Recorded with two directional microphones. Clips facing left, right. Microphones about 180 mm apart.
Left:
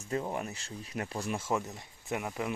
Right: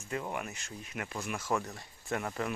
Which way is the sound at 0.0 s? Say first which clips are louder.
Left 3 dB; 30° left (ahead or behind).